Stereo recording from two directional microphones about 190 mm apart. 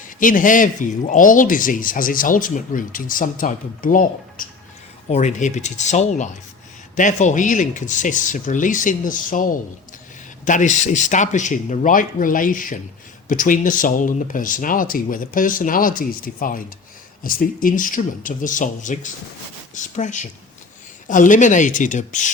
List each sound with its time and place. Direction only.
0.2 s speech: 45° left (ahead or behind)